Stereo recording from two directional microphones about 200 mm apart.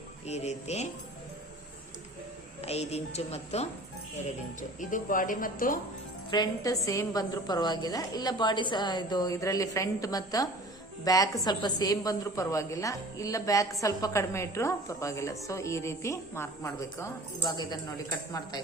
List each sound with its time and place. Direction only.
0.3 s a woman's voice: 35° left (ahead or behind)
2.6 s a woman's voice: 30° left (ahead or behind)
4.8 s a woman's voice: 40° left (ahead or behind)
6.3 s a woman's voice: 20° left (ahead or behind)